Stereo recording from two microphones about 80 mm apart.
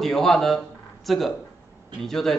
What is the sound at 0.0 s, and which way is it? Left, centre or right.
A man's voice, centre.